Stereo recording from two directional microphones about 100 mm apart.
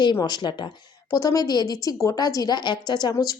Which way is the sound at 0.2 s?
45° left (ahead or behind).